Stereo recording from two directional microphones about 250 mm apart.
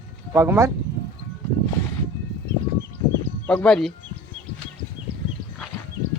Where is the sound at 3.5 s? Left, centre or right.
Centre.